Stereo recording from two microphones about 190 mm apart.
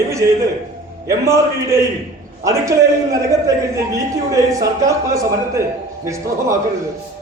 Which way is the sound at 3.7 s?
15° right (ahead or behind).